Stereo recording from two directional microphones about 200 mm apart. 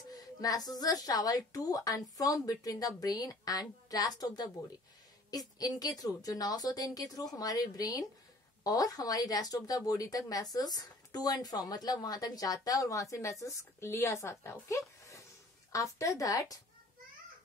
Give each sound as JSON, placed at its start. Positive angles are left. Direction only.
{"t": 0.1, "sound": "a woman's voice", "side_deg": 20}
{"t": 5.6, "sound": "a woman's voice", "side_deg": 20}